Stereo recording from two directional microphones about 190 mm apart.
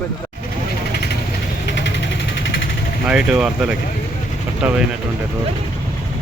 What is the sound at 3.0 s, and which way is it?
Speech, 5° right (ahead or behind).